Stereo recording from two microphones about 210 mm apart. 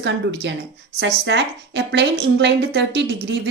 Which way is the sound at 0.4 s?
55° right (ahead or behind).